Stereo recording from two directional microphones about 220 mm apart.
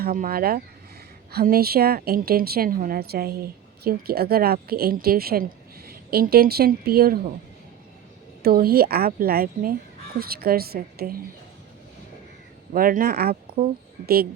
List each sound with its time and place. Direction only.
0.0 s a woman's voice: 40° right (ahead or behind)
8.4 s a woman's voice: 45° right (ahead or behind)
12.7 s speech: 40° right (ahead or behind)